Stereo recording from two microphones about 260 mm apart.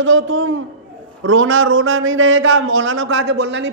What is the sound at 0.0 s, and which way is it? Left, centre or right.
A man's voice, right.